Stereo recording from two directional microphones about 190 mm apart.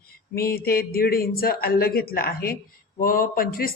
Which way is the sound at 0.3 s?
50° left (ahead or behind).